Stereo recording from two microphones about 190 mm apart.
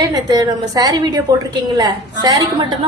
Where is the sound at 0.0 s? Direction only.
20° right (ahead or behind).